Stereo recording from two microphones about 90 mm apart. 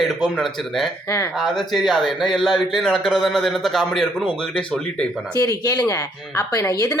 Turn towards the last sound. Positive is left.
turn(degrees=40)  # may be behind; listen again after turning